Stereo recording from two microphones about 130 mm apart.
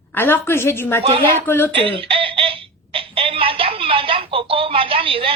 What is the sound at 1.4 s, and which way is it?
Speech, 15° left (ahead or behind).